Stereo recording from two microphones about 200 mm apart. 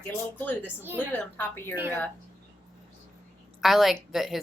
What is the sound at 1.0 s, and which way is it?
Speech, 10° left (ahead or behind).